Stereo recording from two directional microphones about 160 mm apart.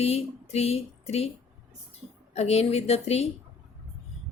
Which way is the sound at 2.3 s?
40° left (ahead or behind).